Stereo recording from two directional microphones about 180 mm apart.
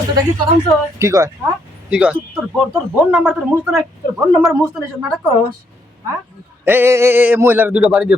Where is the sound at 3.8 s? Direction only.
20° right (ahead or behind).